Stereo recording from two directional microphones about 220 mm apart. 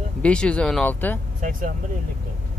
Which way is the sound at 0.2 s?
5° left (ahead or behind).